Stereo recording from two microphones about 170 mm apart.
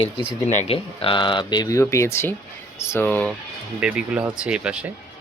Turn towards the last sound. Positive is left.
turn(degrees=-5)  # may be behind; listen again after turning